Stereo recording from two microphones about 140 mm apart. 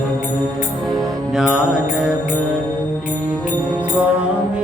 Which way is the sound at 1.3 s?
5° right (ahead or behind).